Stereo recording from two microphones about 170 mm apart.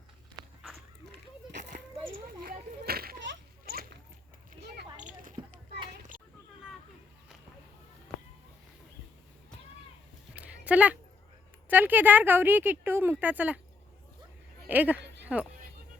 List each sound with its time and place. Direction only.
2.4 s children playing: 60° right (ahead or behind); by 3.8 s 80° right
4.9 s a sound: 45° right (ahead or behind)
10.3 s a sound: 10° right (ahead or behind)
11.7 s a woman's voice: 10° right (ahead or behind)
14.7 s speech: 10° right (ahead or behind)
15.0 s music: 90° right